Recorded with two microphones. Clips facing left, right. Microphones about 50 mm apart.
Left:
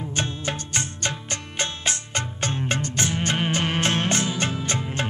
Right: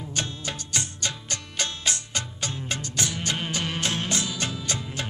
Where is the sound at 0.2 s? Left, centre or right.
Left.